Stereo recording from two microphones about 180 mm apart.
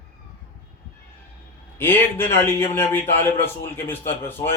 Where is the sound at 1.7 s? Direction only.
10° left (ahead or behind).